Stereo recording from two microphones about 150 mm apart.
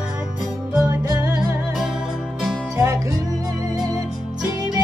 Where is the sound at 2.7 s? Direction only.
20° right (ahead or behind).